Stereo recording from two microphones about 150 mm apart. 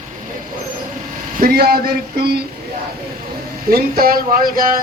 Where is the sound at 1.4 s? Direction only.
90° right.